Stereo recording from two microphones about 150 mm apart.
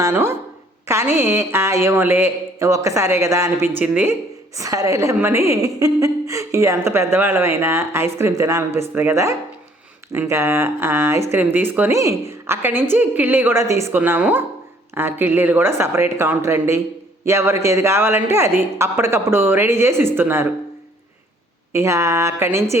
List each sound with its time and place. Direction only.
0.0 s a woman's voice: 15° right (ahead or behind)
4.5 s a woman's voice: 20° right (ahead or behind)
21.7 s a woman's voice: 20° right (ahead or behind)